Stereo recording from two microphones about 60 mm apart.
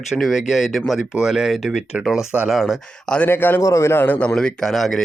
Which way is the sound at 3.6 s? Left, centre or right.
Left.